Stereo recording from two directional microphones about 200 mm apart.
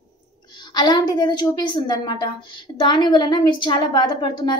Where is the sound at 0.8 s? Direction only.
20° left (ahead or behind).